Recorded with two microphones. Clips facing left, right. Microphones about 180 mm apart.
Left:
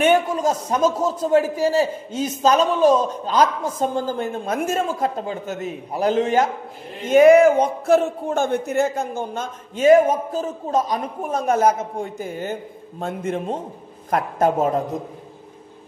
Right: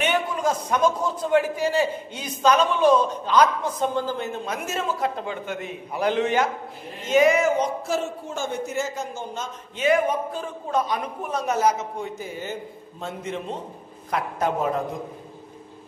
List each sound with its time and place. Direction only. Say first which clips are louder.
0.0 s a man's voice: left 6 dB; 45° left (ahead or behind)
7.1 s a man's voice: left 7 dB; 55° left (ahead or behind)